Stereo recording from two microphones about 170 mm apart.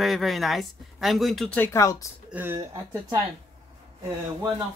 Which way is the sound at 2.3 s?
15° right (ahead or behind).